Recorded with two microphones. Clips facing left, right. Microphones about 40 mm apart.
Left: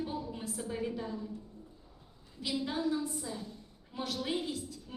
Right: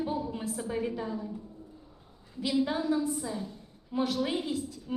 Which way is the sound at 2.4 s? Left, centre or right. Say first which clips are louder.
Right 5 dB; centre.